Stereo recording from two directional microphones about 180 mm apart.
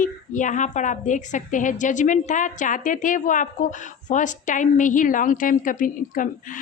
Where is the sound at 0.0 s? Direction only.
45° left (ahead or behind).